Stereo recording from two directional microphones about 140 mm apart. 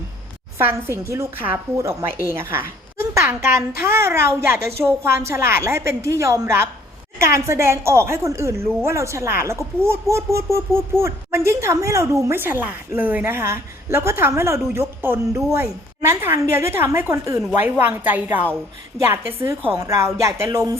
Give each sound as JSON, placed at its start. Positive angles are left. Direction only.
{"t": 0.6, "sound": "a woman's voice", "side_deg": -15}